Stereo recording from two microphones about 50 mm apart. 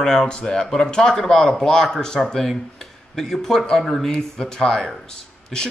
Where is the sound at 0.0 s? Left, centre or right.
Centre.